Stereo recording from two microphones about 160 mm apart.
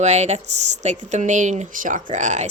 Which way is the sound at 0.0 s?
45° right (ahead or behind).